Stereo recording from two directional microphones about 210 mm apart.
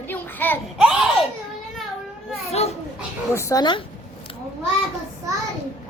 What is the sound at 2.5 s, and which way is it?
Speech, 30° left (ahead or behind).